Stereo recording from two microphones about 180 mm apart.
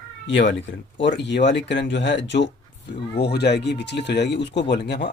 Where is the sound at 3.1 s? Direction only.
65° left (ahead or behind).